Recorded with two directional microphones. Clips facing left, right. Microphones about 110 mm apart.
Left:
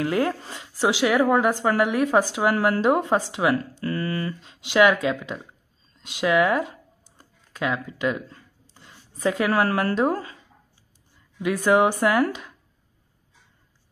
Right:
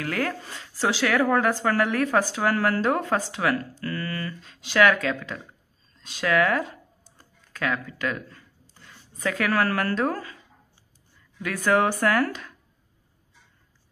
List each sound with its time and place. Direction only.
0.0 s speech: 20° left (ahead or behind)
7.2 s a sound: 20° left (ahead or behind)
11.3 s speech: 20° left (ahead or behind)